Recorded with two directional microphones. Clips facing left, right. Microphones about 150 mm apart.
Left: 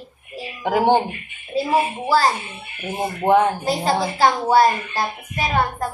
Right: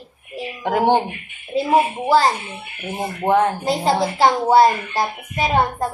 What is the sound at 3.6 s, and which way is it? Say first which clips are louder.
A woman's voice: right 2 dB; 20° right (ahead or behind).